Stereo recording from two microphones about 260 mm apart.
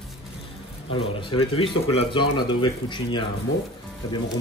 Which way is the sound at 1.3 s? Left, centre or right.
Left.